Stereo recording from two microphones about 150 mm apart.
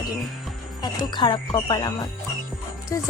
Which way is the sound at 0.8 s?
30° left (ahead or behind).